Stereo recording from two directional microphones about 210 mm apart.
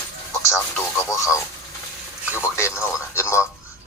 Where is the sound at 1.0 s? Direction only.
15° left (ahead or behind).